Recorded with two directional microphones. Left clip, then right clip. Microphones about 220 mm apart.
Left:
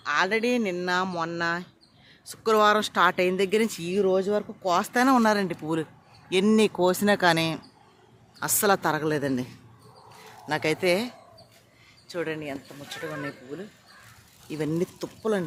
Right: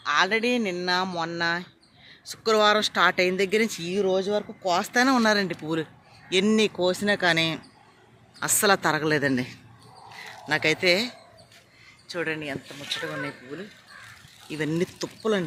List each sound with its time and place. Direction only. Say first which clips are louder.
0.0 s speech: right 2 dB; centre (ahead or behind)
12.0 s speech: right 2 dB; centre (ahead or behind)
13.0 s speech: left 1 dB; 20° right (ahead or behind)
14.5 s speech: right 1 dB; 5° left (ahead or behind)